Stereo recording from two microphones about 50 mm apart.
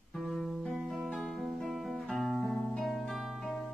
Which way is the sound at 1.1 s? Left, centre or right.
Centre.